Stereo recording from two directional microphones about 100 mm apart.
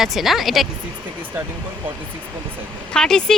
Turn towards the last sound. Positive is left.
turn(degrees=5)  # may be behind; listen again after turning